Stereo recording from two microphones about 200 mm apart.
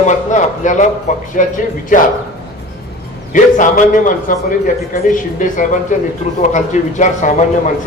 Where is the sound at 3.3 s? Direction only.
40° left (ahead or behind).